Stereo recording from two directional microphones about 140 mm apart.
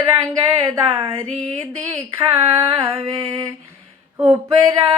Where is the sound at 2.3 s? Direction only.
25° right (ahead or behind).